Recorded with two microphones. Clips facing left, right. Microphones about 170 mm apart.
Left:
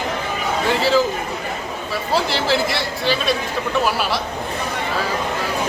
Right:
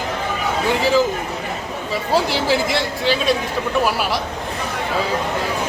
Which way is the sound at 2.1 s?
15° right (ahead or behind).